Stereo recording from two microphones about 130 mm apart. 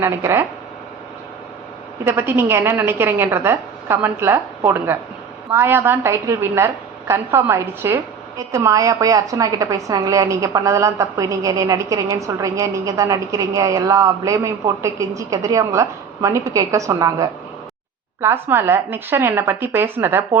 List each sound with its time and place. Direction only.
0.0 s a woman's voice: 20° right (ahead or behind)
2.0 s a woman's voice: 15° right (ahead or behind)